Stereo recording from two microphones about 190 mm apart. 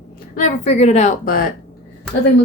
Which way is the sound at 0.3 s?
40° left (ahead or behind).